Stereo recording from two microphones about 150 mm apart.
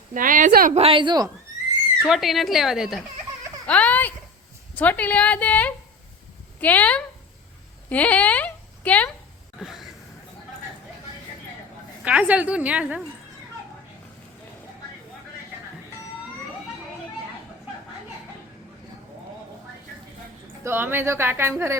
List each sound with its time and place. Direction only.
0.1 s a woman's voice: 60° right (ahead or behind)
0.7 s a woman's voice: 40° right (ahead or behind)
2.0 s speech: centre (ahead or behind)
3.7 s a woman's voice: 10° left (ahead or behind)
7.9 s a sound: 10° left (ahead or behind)
9.6 s a sound: centre (ahead or behind)
12.0 s a woman's voice: 10° right (ahead or behind)
20.7 s a woman's voice: 15° right (ahead or behind)